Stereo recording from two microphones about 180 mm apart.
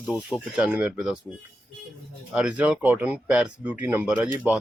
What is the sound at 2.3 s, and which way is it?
Speech, 5° right (ahead or behind).